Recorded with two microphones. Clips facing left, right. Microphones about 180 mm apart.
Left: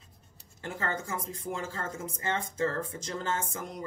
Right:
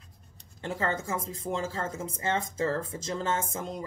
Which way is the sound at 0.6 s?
25° right (ahead or behind).